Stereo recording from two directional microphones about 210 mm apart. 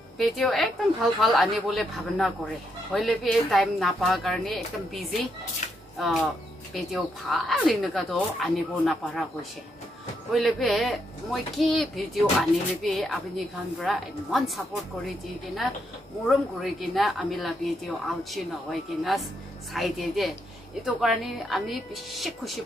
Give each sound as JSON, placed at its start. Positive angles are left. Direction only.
{"t": 0.2, "sound": "a woman's voice", "side_deg": 0}
{"t": 5.6, "sound": "a sound", "side_deg": 35}
{"t": 5.9, "sound": "a woman's voice", "side_deg": 0}
{"t": 10.3, "sound": "a woman's voice", "side_deg": 0}
{"t": 16.3, "sound": "a woman's voice", "side_deg": 0}